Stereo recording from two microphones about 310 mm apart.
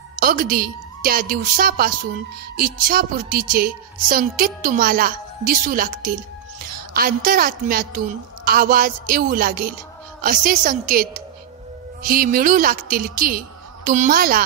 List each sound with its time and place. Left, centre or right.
0.2 s a woman's voice: right